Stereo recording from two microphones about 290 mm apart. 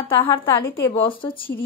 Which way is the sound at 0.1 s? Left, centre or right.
Centre.